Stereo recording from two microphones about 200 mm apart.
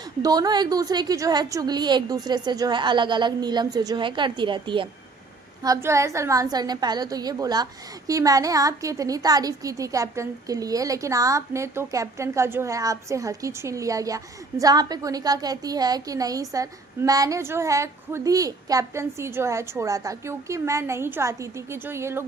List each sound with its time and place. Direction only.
0.2 s a woman's voice: 20° right (ahead or behind)